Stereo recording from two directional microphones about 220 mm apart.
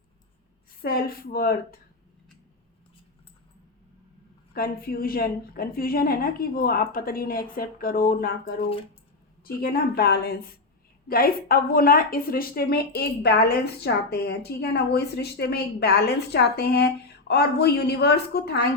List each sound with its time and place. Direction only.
0.8 s a woman's voice: 45° left (ahead or behind)
4.5 s a woman's voice: 45° left (ahead or behind)
9.4 s a woman's voice: 45° left (ahead or behind)